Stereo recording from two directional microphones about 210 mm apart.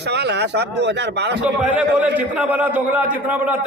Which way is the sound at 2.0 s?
5° right (ahead or behind).